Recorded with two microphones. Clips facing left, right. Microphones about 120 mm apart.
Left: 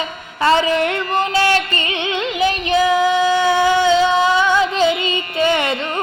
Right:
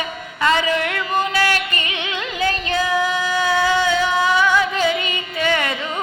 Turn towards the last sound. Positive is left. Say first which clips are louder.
# left 4 dB
turn(degrees=25)  # may be behind; listen again after turning